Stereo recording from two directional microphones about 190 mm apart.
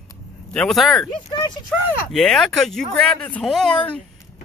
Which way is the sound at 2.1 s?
Centre (ahead or behind).